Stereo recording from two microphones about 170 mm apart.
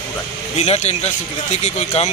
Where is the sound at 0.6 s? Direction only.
40° left (ahead or behind).